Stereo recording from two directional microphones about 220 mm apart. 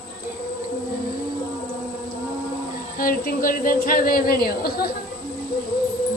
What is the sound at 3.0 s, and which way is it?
Speech, 40° left (ahead or behind).